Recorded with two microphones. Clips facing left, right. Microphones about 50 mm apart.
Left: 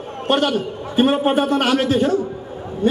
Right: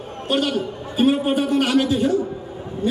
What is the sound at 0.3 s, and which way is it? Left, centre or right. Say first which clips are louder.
A man's voice: left 3 dB; left.